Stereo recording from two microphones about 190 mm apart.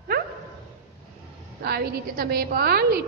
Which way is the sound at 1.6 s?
55° right (ahead or behind).